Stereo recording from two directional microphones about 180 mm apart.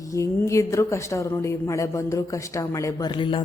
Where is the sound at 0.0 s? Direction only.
15° left (ahead or behind).